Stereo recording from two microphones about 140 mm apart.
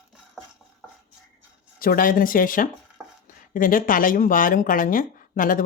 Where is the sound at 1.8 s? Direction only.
85° left.